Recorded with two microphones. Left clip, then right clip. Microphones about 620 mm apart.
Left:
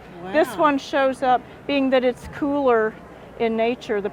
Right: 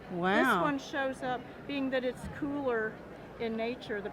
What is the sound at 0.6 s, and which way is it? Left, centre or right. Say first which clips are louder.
A woman's voice: left 13 dB; left.